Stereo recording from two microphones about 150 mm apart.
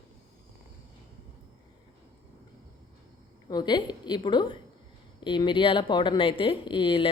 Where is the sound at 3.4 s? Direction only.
30° left (ahead or behind).